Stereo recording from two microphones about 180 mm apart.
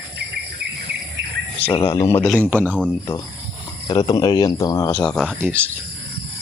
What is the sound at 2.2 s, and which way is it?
Speech, centre (ahead or behind).